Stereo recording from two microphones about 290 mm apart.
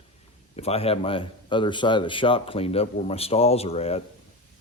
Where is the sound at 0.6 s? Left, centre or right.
Left.